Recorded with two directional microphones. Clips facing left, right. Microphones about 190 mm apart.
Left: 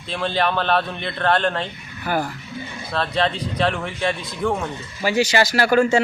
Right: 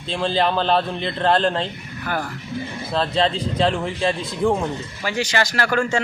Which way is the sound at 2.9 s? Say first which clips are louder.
Right 1 dB; 30° right (ahead or behind).